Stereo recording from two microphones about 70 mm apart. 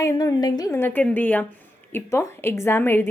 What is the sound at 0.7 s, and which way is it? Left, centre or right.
Speech, left.